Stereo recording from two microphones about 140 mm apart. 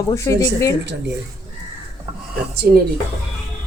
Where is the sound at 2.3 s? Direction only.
90° right.